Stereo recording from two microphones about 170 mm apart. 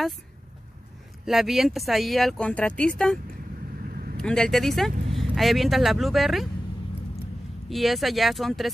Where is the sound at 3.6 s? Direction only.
55° right (ahead or behind).